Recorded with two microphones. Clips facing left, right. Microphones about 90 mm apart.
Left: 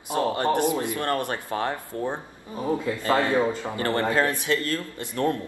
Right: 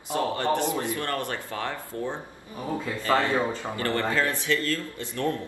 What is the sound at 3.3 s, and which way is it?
Speech, 20° left (ahead or behind).